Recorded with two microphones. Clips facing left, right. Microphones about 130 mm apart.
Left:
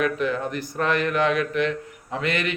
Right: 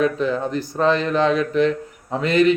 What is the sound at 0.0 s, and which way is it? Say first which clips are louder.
Speech: right 4 dB; 30° right (ahead or behind).